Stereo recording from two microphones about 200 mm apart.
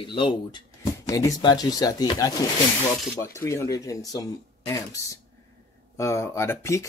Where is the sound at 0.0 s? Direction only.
25° left (ahead or behind).